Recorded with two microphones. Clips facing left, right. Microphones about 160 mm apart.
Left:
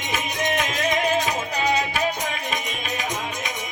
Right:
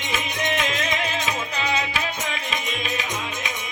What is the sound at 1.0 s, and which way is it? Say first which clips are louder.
Music: left 4 dB; 45° left (ahead or behind).